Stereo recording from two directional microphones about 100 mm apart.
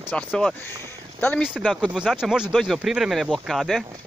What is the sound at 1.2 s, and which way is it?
Speech, 10° left (ahead or behind).